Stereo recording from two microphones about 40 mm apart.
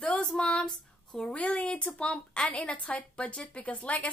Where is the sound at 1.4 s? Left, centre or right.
Left.